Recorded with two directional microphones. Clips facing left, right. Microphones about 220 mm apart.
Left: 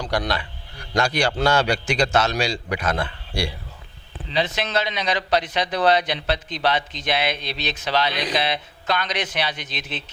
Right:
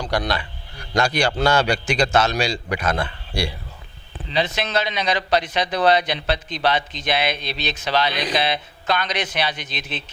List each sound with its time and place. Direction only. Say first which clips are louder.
0.1 s a man's voice: right 1 dB; 15° right (ahead or behind)